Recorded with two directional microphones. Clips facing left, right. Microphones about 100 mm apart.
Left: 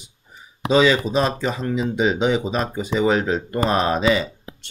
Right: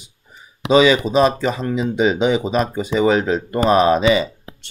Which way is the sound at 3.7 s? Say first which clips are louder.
Right 7 dB; 90° right.